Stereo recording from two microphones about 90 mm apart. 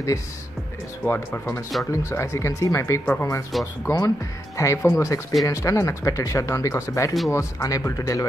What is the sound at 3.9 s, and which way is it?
Speech, 30° left (ahead or behind).